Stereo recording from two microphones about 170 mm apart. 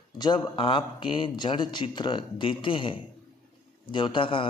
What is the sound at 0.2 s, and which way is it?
Speech, 25° left (ahead or behind).